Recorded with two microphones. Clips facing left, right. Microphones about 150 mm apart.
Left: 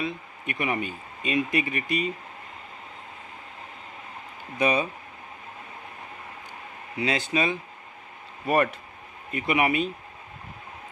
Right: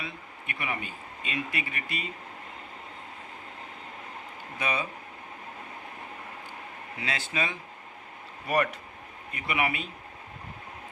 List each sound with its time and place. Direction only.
0.0 s speech: 20° left (ahead or behind)
4.5 s speech: 15° left (ahead or behind)
7.0 s speech: 15° left (ahead or behind)
8.4 s speech: 30° left (ahead or behind)